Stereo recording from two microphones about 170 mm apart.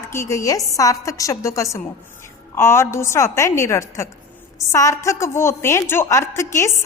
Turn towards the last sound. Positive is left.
turn(degrees=15)  # may be behind; listen again after turning